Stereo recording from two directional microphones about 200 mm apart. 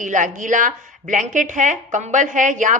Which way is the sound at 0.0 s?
40° right (ahead or behind).